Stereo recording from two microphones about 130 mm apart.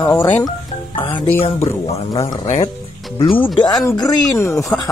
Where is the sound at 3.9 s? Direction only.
25° left (ahead or behind).